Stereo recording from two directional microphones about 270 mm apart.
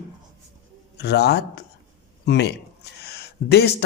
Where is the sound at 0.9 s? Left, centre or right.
Left.